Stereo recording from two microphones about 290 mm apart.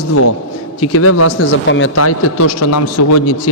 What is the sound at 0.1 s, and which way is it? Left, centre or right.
A man's voice, left.